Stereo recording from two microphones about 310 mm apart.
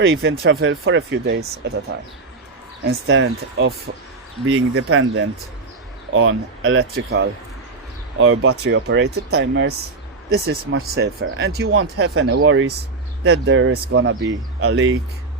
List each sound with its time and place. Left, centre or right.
0.0 s speech: right
2.8 s speech: right